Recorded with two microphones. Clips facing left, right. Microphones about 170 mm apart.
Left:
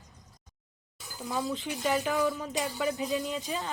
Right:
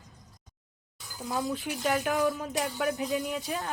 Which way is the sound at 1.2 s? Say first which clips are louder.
Right 1 dB; centre (ahead or behind).